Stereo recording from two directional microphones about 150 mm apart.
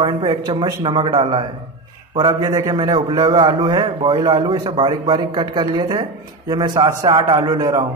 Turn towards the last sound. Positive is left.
turn(degrees=-25)  # may be behind; listen again after turning